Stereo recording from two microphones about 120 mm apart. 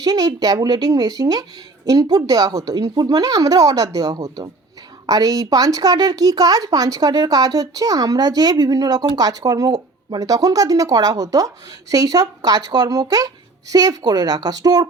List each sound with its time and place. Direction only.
0.0 s speech: 30° right (ahead or behind)